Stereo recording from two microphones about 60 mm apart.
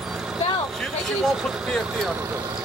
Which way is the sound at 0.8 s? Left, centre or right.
Centre.